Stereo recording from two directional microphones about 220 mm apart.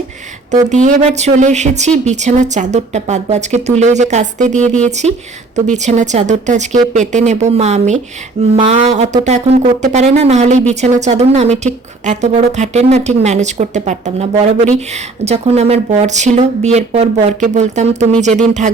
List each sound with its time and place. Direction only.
0.5 s speech: 35° right (ahead or behind)